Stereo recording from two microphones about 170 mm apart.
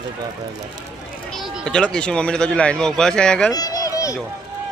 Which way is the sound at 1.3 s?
Centre (ahead or behind).